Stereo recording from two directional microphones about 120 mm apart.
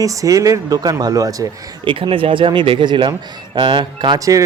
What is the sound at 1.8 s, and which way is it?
Speech, 45° right (ahead or behind).